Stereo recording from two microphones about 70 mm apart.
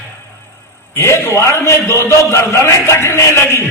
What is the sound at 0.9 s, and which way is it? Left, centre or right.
A man's voice, left.